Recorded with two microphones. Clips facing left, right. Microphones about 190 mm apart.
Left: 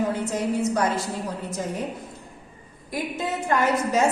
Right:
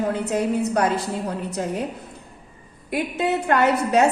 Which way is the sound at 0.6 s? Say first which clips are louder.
Right 2 dB; 60° right (ahead or behind).